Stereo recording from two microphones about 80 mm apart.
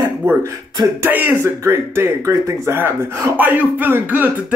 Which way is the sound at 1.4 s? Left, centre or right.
Right.